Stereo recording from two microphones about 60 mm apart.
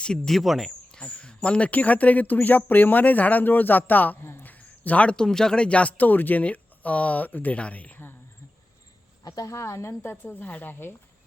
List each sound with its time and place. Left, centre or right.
0.3 s speech: centre
0.9 s speech: centre
4.2 s a sound: left
4.4 s speech: left
9.2 s speech: left
10.4 s speech: left